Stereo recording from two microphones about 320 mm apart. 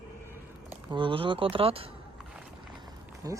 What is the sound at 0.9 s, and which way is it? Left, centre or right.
Speech, centre.